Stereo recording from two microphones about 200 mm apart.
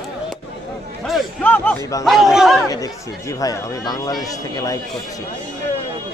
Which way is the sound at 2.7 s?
15° left (ahead or behind).